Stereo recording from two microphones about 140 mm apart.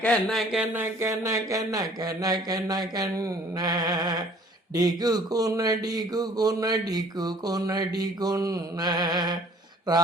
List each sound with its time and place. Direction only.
0.0 s speech: 5° left (ahead or behind)
0.5 s speech: 10° right (ahead or behind); by 9.4 s 30° right (ahead or behind)